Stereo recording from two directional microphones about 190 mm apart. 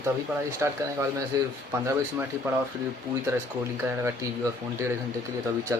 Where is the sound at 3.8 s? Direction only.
10° right (ahead or behind).